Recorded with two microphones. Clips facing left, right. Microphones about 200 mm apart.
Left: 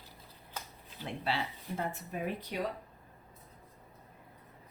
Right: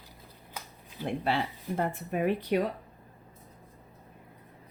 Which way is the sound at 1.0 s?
50° right (ahead or behind).